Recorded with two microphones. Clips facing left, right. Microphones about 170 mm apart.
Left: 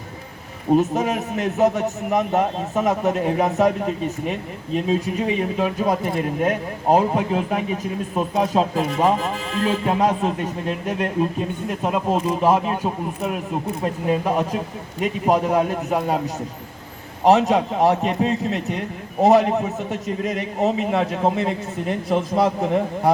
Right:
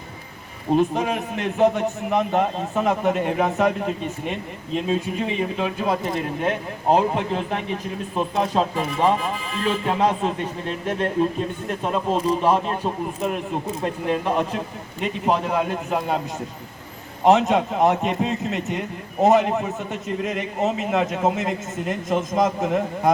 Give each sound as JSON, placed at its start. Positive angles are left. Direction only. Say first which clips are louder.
{"t": 0.8, "sound": "a man's voice", "louder": "left 1 dB", "side_deg": 5}
{"t": 17.2, "sound": "a man's voice", "louder": "left 1 dB", "side_deg": 35}
{"t": 18.0, "sound": "a man's voice", "louder": "left 2 dB", "side_deg": 0}
{"t": 19.2, "sound": "a man's voice", "louder": "left 2 dB", "side_deg": 35}
{"t": 19.5, "sound": "a man's voice", "louder": "left 2 dB", "side_deg": 0}